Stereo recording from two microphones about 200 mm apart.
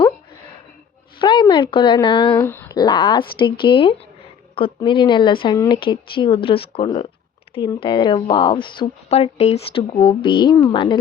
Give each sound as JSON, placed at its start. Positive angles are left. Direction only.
{"t": 1.2, "sound": "speech", "side_deg": 25}
{"t": 2.4, "sound": "speech", "side_deg": 10}